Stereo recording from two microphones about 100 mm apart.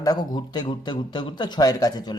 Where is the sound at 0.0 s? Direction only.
40° left (ahead or behind).